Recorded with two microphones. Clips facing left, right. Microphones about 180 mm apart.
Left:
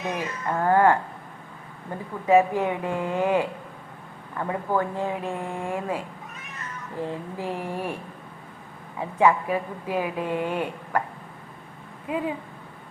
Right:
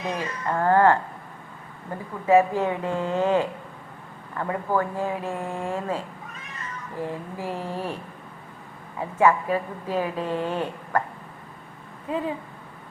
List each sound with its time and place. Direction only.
0.0 s speech: 20° left (ahead or behind)
0.3 s speech: 5° left (ahead or behind)
0.6 s a woman's voice: 15° left (ahead or behind)
2.2 s a woman's voice: 15° left (ahead or behind)
7.1 s a woman's voice: 15° left (ahead or behind)
9.0 s a woman's voice: 15° left (ahead or behind)
12.0 s a woman's voice: 15° left (ahead or behind)